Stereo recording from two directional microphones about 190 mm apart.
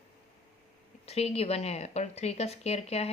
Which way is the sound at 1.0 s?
30° left (ahead or behind).